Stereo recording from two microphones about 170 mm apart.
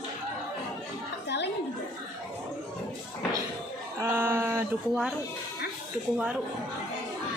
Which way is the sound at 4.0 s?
15° right (ahead or behind).